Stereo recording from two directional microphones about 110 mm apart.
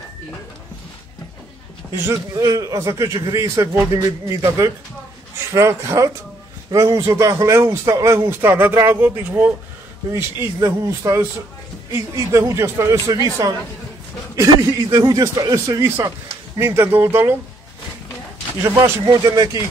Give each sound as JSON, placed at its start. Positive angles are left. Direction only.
{"t": 1.9, "sound": "a man's voice", "side_deg": -30}
{"t": 19.0, "sound": "speech", "side_deg": -35}